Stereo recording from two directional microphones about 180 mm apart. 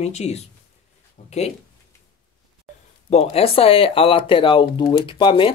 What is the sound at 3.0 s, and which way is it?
Speech, 35° left (ahead or behind).